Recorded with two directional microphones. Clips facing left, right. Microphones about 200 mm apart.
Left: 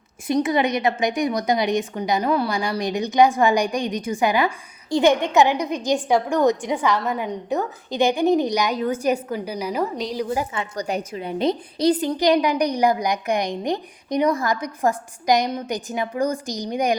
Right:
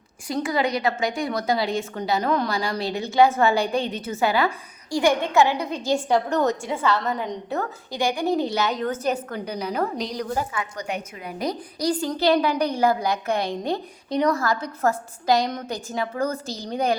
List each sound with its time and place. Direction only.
0.3 s a woman's voice: 20° left (ahead or behind); by 10.4 s 5° left (ahead or behind)
10.5 s a woman's voice: 30° left (ahead or behind); by 17.0 s 15° left (ahead or behind)